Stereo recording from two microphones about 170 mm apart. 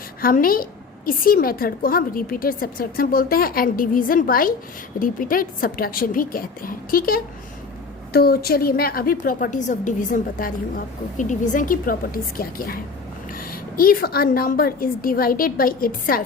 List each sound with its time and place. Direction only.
0.2 s a woman's voice: 60° left (ahead or behind)